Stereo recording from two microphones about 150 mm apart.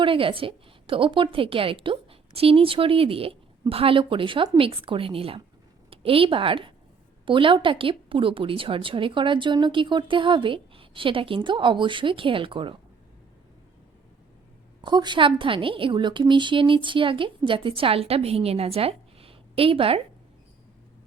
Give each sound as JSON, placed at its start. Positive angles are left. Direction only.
{"t": 0.0, "sound": "speech", "side_deg": -35}
{"t": 14.8, "sound": "speech", "side_deg": -30}